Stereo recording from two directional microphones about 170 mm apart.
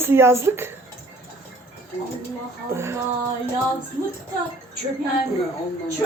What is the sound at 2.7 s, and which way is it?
Music, 15° right (ahead or behind).